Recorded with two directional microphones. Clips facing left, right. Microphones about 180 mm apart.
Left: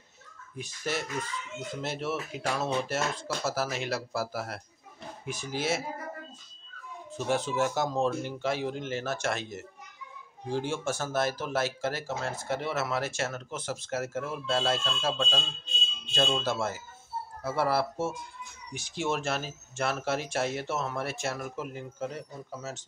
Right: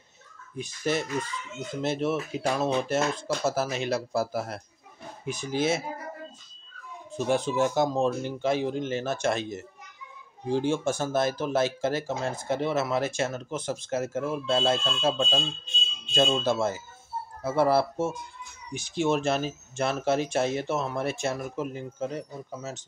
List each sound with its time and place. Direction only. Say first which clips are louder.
0.6 s speech: right 5 dB; 20° right (ahead or behind)
7.1 s speech: right 3 dB; 15° right (ahead or behind)
10.5 s speech: right 5 dB; 20° right (ahead or behind)